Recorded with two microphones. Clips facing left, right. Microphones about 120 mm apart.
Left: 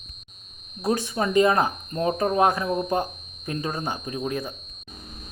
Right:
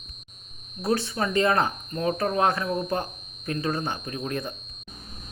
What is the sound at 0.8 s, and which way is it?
Speech, 15° left (ahead or behind).